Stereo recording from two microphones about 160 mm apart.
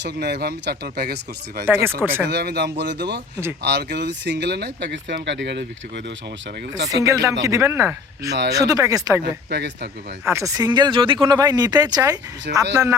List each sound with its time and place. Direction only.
0.0 s speech: 90° right
1.6 s speech: 15° right (ahead or behind)
2.2 s speech: 90° right
6.9 s speech: 20° right (ahead or behind)
9.2 s speech: 90° right
10.2 s speech: 20° right (ahead or behind)
12.5 s speech: 70° right (ahead or behind)